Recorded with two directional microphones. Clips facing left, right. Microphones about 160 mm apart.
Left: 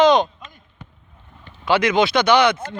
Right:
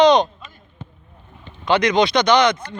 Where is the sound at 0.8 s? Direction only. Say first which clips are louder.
Right 5 dB; 25° right (ahead or behind).